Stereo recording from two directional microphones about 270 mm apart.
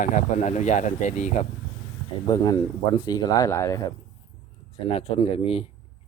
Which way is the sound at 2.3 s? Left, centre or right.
Centre.